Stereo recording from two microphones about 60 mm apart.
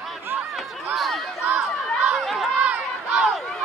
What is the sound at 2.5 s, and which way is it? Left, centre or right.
Run, right.